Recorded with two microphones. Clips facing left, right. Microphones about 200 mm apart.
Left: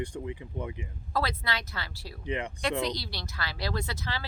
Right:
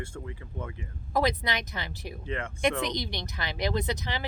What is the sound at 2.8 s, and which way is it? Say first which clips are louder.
Speech: even; 20° right (ahead or behind).